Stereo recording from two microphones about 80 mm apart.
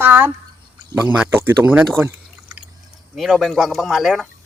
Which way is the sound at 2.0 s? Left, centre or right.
Right.